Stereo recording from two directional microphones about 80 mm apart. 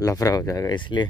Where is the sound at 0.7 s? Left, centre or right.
Left.